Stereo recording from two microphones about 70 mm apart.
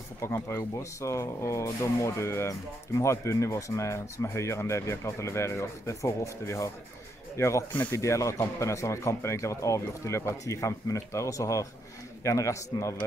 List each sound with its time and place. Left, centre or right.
0.2 s speech: left